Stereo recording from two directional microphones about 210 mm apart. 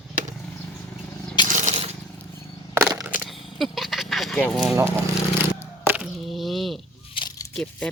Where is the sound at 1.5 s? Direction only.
35° right (ahead or behind).